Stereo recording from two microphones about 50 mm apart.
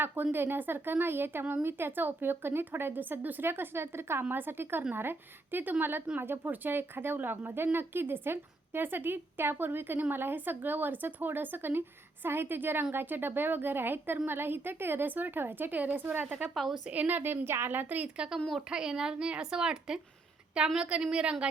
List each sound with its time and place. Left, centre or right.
0.0 s a woman's voice: right
17.4 s a woman's voice: right
18.7 s a woman's voice: centre